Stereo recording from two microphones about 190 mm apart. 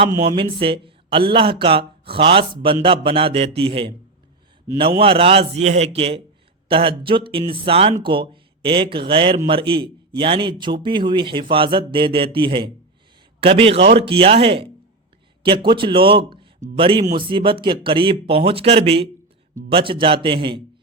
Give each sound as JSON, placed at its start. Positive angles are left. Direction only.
{"t": 0.2, "sound": "a man's voice", "side_deg": -30}
{"t": 4.9, "sound": "a man's voice", "side_deg": -30}